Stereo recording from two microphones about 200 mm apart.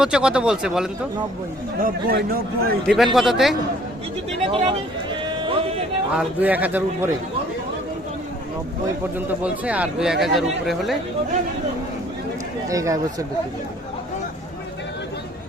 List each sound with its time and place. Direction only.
0.0 s speech: 5° right (ahead or behind)
1.8 s a man's voice: 50° right (ahead or behind)
2.8 s speech: centre (ahead or behind)
4.3 s speech: 30° right (ahead or behind)
6.1 s a man's voice: 10° right (ahead or behind)
9.1 s speech: 5° right (ahead or behind)
12.6 s a man's voice: 15° right (ahead or behind)